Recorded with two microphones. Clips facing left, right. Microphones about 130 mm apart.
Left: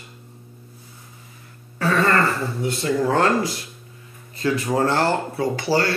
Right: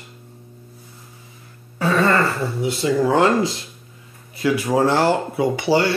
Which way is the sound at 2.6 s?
15° right (ahead or behind).